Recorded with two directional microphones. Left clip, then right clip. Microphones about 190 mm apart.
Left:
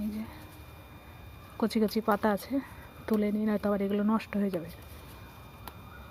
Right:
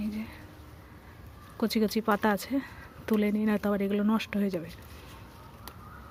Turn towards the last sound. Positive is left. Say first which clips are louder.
# right 1 dB
turn(degrees=-15)  # may be behind; listen again after turning